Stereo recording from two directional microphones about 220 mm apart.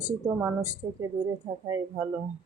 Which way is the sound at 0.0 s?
15° right (ahead or behind).